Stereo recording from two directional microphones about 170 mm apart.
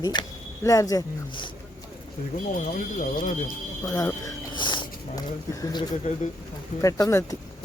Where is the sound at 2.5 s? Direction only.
50° left (ahead or behind).